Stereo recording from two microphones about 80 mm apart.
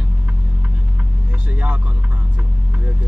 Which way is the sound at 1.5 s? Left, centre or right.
Centre.